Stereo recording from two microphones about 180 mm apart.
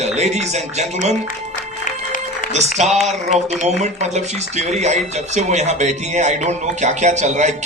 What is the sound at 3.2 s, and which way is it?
A man's voice, 40° right (ahead or behind).